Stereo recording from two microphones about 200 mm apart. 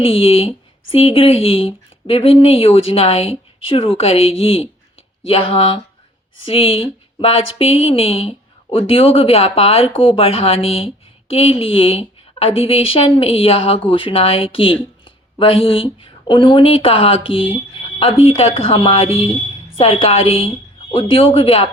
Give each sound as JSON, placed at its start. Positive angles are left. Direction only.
{"t": 0.0, "sound": "speech", "side_deg": 30}